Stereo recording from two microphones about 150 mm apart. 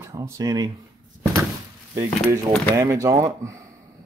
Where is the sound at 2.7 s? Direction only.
20° right (ahead or behind).